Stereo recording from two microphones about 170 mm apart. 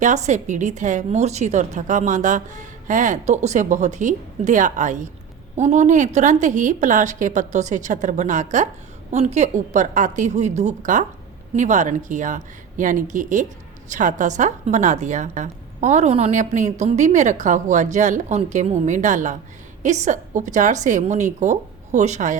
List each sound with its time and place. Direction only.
0.0 s a woman's voice: 45° right (ahead or behind)